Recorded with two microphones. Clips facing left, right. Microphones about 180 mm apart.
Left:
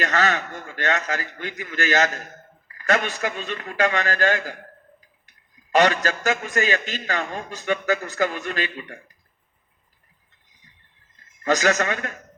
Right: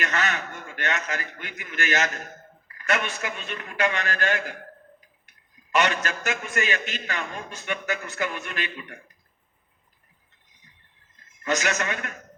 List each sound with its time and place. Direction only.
0.0 s a man's voice: 35° left (ahead or behind)
2.0 s a man's voice: centre (ahead or behind)
2.8 s a man's voice: 35° left (ahead or behind)
5.7 s a man's voice: 35° left (ahead or behind)
11.4 s a man's voice: 35° left (ahead or behind)